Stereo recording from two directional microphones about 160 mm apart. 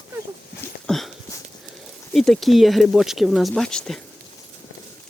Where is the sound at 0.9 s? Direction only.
Centre (ahead or behind).